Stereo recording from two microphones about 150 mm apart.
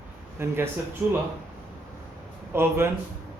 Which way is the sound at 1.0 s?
5° right (ahead or behind).